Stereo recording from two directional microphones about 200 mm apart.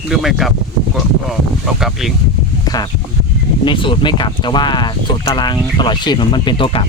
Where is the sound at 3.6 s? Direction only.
25° left (ahead or behind).